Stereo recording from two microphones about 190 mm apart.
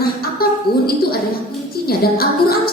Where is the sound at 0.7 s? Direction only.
55° left (ahead or behind).